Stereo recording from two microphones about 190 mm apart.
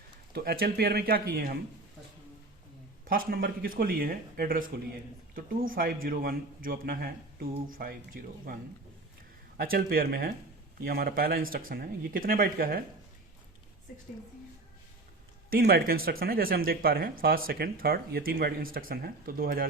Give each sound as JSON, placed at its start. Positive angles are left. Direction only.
{"t": 0.3, "sound": "speech", "side_deg": -55}
{"t": 3.0, "sound": "speech", "side_deg": -50}
{"t": 9.6, "sound": "speech", "side_deg": -50}
{"t": 15.4, "sound": "speech", "side_deg": -50}